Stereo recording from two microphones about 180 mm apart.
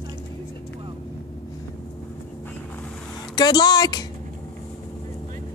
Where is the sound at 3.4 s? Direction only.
25° left (ahead or behind).